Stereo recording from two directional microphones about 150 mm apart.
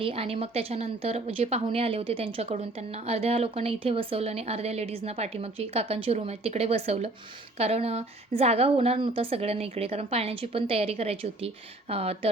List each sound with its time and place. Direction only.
0.0 s speech: 40° right (ahead or behind)